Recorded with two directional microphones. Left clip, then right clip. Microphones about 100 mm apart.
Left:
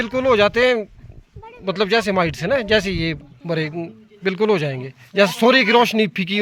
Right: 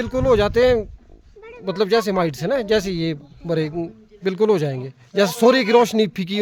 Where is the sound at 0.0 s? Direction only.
50° right (ahead or behind).